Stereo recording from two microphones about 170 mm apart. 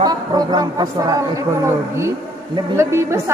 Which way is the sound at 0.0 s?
25° right (ahead or behind).